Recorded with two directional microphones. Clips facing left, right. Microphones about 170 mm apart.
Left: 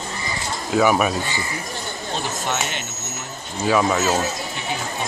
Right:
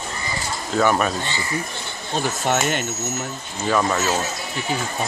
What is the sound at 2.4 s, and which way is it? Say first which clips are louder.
Speech: right 5 dB; 40° right (ahead or behind).